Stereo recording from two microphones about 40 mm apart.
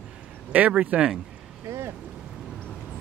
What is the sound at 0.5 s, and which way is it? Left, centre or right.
Speech, right.